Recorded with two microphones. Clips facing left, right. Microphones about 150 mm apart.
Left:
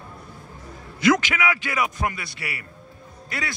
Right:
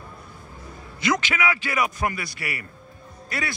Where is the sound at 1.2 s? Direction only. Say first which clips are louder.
Even; 15° left (ahead or behind).